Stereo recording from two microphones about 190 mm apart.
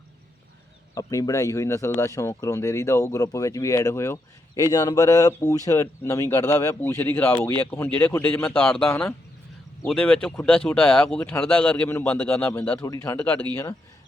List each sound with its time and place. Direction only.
0.9 s a man's voice: 15° left (ahead or behind)